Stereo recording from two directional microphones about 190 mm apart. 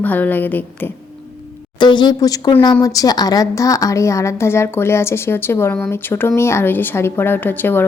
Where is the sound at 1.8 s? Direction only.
25° left (ahead or behind).